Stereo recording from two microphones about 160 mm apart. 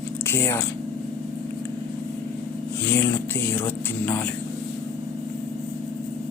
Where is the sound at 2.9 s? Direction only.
15° left (ahead or behind).